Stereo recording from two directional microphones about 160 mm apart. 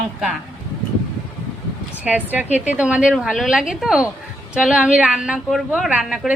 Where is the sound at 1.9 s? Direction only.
10° right (ahead or behind).